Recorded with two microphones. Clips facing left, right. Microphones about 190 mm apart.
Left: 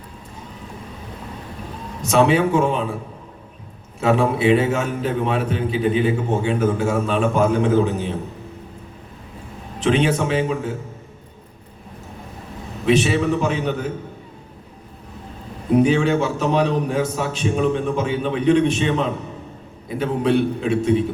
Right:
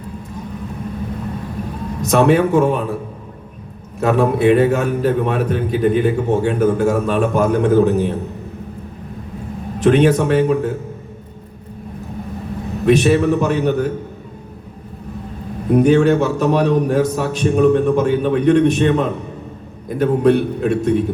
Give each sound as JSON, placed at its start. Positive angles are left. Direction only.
{"t": 2.1, "sound": "a man's voice", "side_deg": -55}
{"t": 4.0, "sound": "a man's voice", "side_deg": -50}
{"t": 9.8, "sound": "a man's voice", "side_deg": -55}
{"t": 12.8, "sound": "a man's voice", "side_deg": -50}
{"t": 15.8, "sound": "a man's voice", "side_deg": -55}